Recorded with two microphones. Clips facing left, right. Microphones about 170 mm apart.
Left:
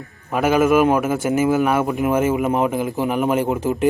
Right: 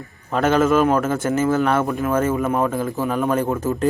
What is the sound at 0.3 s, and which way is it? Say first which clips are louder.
A man's voice: left 1 dB; 10° left (ahead or behind).